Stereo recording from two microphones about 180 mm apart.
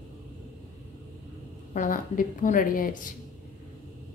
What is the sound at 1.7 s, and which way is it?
A woman's voice, 50° left (ahead or behind).